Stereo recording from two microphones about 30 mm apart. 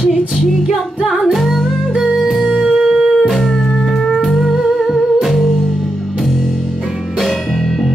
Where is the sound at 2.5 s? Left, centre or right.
Right.